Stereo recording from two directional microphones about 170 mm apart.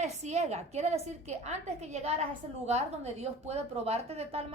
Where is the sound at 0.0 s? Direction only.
40° right (ahead or behind).